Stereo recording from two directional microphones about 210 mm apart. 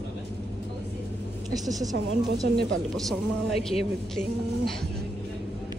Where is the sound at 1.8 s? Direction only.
15° right (ahead or behind).